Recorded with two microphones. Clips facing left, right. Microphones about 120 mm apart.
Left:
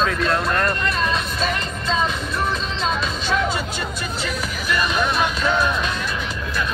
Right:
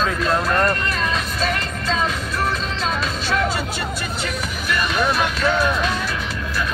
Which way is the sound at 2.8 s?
5° right (ahead or behind).